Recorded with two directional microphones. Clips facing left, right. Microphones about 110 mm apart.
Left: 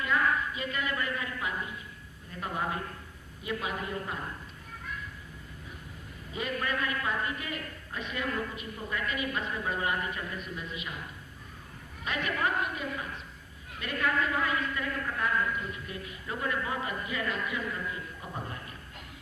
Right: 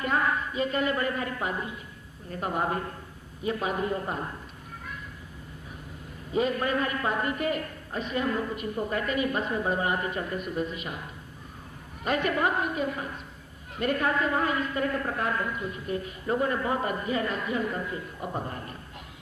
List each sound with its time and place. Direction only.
0.0 s a woman's voice: 35° right (ahead or behind)
6.3 s a man's voice: 30° right (ahead or behind)
12.0 s a man's voice: 45° right (ahead or behind)